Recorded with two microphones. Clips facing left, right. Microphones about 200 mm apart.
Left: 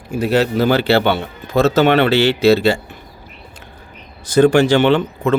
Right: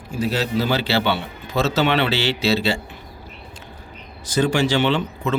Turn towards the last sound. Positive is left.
turn(degrees=55)  # may be behind; listen again after turning